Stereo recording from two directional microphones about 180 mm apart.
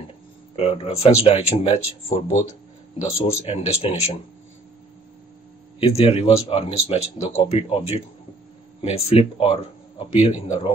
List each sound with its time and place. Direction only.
0.6 s speech: 35° left (ahead or behind)
5.8 s speech: 30° left (ahead or behind)